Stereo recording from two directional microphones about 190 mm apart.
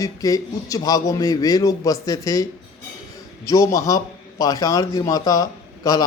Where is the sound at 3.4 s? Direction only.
15° left (ahead or behind).